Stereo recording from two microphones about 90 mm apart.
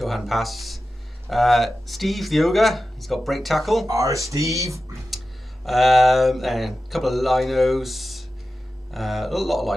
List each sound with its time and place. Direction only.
0.0 s speech: centre (ahead or behind)
3.8 s speech: 35° right (ahead or behind)
5.7 s speech: centre (ahead or behind)